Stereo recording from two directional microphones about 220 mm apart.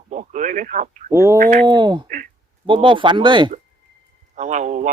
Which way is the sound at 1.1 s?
15° right (ahead or behind).